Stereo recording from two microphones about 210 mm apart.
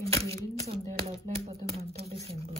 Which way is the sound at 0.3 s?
30° right (ahead or behind).